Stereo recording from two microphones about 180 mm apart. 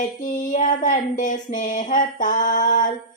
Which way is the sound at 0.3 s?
45° left (ahead or behind).